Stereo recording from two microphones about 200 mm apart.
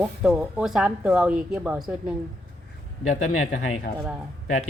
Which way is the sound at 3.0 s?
40° left (ahead or behind).